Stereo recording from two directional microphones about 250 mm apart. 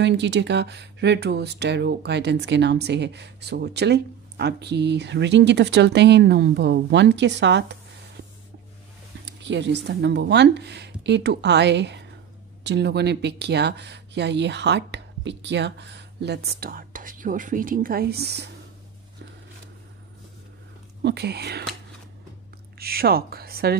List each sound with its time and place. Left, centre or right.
0.0 s speech: right
9.2 s speech: right
21.0 s speech: right
22.8 s a woman's voice: right